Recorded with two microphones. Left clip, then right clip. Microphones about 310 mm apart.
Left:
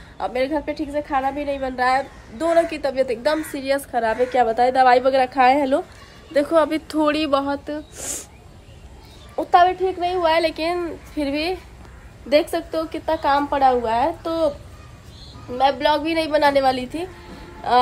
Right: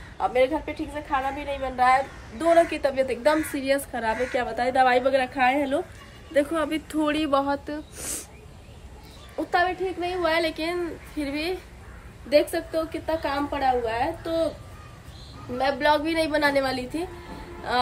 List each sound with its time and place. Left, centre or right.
0.2 s a woman's voice: centre
9.5 s a woman's voice: centre
12.3 s a woman's voice: left
15.5 s a woman's voice: centre